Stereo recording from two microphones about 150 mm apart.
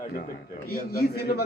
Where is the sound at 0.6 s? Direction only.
90° left.